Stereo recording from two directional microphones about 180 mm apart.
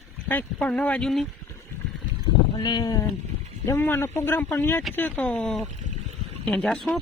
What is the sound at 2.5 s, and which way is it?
Sheep, 25° left (ahead or behind).